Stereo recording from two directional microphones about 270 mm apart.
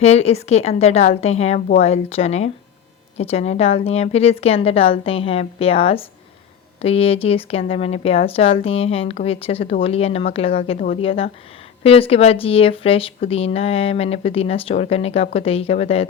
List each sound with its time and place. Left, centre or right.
0.0 s speech: left